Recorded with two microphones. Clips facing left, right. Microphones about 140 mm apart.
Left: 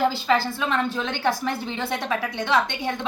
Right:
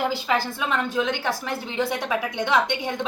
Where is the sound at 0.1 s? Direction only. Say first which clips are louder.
Left 2 dB; 15° right (ahead or behind).